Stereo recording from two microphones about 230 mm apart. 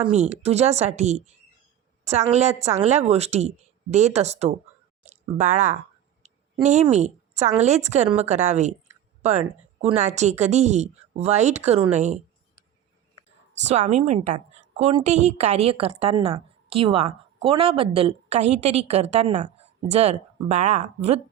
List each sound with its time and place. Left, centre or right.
0.1 s a woman's voice: right
13.7 s a woman's voice: right